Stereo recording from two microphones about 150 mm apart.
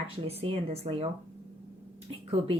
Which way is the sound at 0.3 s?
40° right (ahead or behind).